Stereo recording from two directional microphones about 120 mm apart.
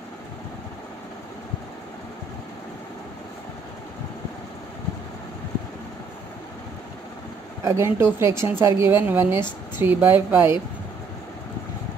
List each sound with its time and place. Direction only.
7.6 s speech: 20° right (ahead or behind)